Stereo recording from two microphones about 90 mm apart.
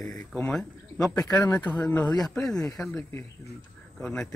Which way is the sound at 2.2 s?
5° left (ahead or behind).